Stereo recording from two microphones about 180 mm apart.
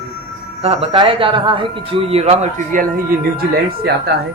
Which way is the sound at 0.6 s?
35° right (ahead or behind).